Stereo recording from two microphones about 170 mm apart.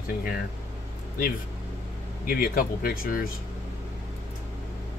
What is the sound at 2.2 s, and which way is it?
Speech, 55° left (ahead or behind).